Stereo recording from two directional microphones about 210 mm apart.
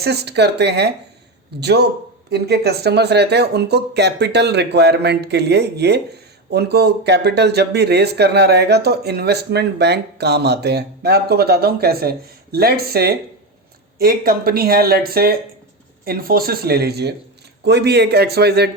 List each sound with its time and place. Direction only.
0.0 s speech: 50° right (ahead or behind)